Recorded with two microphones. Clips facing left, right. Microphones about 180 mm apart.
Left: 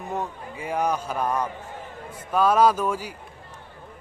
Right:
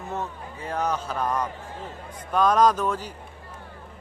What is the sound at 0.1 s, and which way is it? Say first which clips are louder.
A man's voice: left 2 dB; 15° left (ahead or behind).